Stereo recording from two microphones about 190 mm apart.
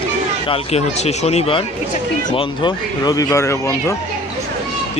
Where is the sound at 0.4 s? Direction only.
30° left (ahead or behind); by 3.9 s 15° left (ahead or behind).